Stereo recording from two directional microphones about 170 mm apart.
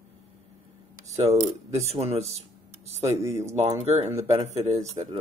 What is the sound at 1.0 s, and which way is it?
Speech, 40° right (ahead or behind).